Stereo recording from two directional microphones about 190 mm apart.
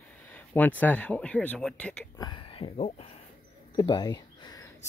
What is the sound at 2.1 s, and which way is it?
Speech, 20° left (ahead or behind).